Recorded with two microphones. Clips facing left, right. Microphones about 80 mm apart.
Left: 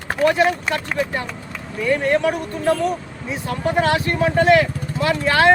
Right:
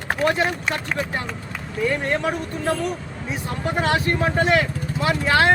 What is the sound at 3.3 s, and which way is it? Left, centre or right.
Speech, right.